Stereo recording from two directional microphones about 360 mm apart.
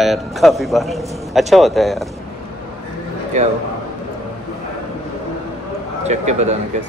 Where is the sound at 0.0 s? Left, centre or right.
Centre.